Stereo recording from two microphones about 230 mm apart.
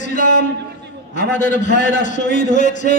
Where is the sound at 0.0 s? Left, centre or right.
Left.